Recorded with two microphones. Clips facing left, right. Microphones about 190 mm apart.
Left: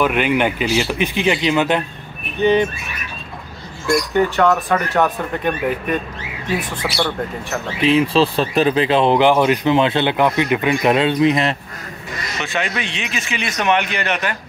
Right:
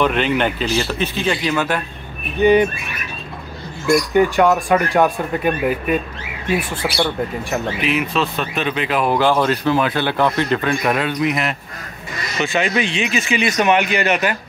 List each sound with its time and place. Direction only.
0.0 s speech: 10° left (ahead or behind)
2.4 s speech: 10° right (ahead or behind)
4.1 s speech: 10° right (ahead or behind)
7.8 s speech: 30° left (ahead or behind)
12.4 s speech: 5° right (ahead or behind)